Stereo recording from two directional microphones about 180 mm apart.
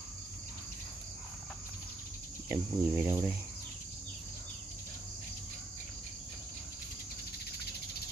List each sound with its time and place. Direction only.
2.5 s speech: 15° right (ahead or behind)